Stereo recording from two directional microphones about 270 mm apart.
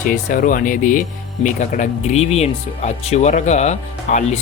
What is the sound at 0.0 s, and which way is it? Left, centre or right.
Speech, left.